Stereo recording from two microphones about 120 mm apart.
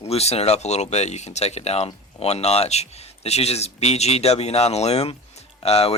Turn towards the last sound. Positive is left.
turn(degrees=60)  # may be behind; listen again after turning